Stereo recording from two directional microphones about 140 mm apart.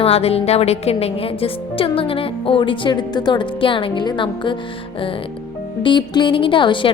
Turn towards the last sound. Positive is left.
turn(degrees=35)  # may be behind; listen again after turning